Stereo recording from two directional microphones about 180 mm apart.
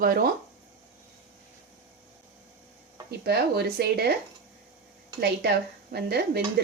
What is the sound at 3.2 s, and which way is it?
Speech, 60° right (ahead or behind).